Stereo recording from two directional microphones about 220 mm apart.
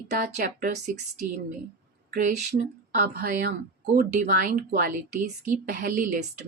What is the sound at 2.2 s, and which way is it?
Speech, 35° right (ahead or behind).